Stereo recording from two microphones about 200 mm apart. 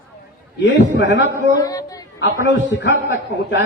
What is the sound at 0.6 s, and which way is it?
Speech, 65° left (ahead or behind).